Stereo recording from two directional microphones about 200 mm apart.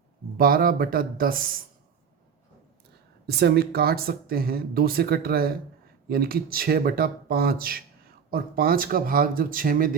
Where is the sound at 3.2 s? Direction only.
55° right (ahead or behind).